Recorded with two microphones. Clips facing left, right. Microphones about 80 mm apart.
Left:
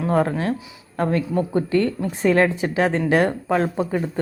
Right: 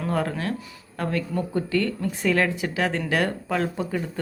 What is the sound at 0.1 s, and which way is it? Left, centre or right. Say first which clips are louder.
A woman's voice: left 6 dB; left.